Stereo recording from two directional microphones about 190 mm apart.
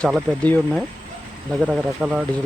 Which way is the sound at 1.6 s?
5° right (ahead or behind).